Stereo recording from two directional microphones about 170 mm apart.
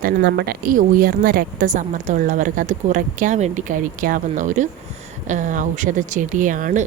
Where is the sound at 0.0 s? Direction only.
70° right (ahead or behind).